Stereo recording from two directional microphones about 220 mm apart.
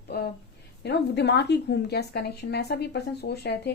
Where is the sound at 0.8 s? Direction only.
50° left (ahead or behind).